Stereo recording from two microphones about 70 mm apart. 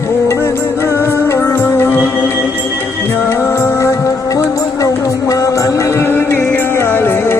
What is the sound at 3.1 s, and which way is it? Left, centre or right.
Music, left.